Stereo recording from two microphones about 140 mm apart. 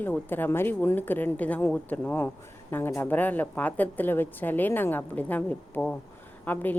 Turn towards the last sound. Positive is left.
turn(degrees=10)  # may be behind; listen again after turning